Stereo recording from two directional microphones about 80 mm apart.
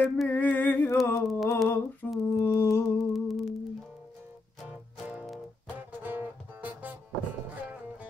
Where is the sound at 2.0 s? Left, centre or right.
Left.